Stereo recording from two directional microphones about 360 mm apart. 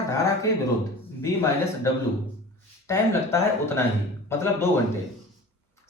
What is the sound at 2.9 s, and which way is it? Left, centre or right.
Speech, centre.